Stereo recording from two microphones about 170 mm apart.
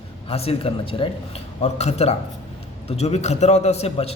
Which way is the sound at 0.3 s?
35° left (ahead or behind).